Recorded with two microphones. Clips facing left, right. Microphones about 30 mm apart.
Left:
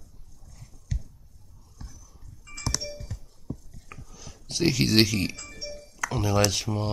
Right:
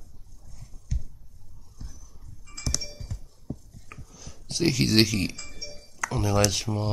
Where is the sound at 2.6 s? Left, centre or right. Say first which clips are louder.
Left 1 dB; centre.